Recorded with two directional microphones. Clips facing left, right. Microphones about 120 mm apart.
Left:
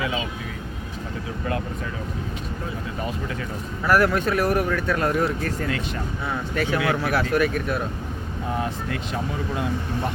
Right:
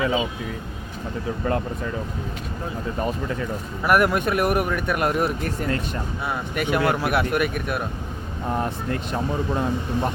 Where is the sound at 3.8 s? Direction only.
15° right (ahead or behind).